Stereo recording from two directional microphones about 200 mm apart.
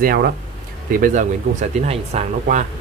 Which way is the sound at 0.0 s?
45° right (ahead or behind).